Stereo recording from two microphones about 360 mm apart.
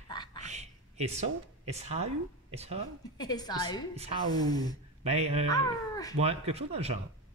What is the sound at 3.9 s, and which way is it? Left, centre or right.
Speech, centre.